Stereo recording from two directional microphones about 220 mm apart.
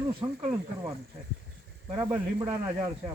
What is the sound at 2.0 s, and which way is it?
Speech, 15° right (ahead or behind).